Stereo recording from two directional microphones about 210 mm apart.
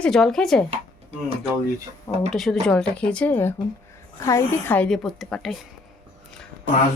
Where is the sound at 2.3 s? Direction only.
Centre (ahead or behind).